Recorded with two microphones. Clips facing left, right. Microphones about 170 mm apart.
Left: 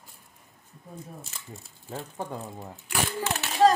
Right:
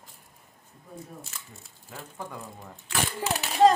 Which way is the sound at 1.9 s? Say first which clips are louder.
Left 5 dB; 35° left (ahead or behind).